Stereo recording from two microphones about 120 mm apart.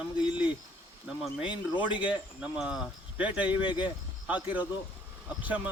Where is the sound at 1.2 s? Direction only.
10° right (ahead or behind).